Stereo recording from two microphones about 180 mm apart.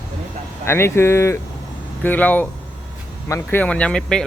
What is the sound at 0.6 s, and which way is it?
Speech, 15° left (ahead or behind).